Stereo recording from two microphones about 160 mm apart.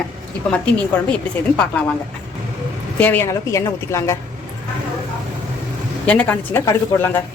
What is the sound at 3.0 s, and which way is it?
A woman's voice, 10° left (ahead or behind).